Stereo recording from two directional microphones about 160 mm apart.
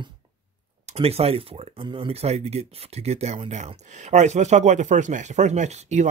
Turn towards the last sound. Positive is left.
turn(degrees=-45)  # may be behind; listen again after turning